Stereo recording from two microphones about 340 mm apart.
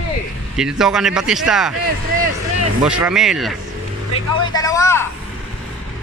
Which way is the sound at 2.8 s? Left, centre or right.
Centre.